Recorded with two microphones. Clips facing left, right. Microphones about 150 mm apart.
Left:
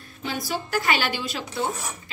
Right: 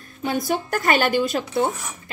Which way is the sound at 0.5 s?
50° right (ahead or behind).